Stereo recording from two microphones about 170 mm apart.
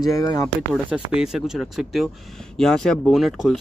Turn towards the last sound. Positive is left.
turn(degrees=0)  # may be behind; listen again after turning